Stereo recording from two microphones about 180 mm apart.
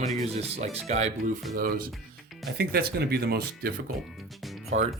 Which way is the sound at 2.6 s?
60° right (ahead or behind).